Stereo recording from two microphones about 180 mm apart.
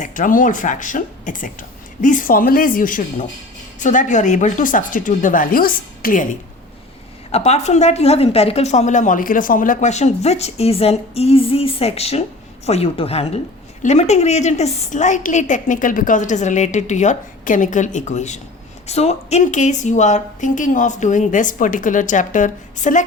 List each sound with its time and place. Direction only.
0.0 s a woman's voice: 45° left (ahead or behind)
7.3 s a woman's voice: 35° left (ahead or behind)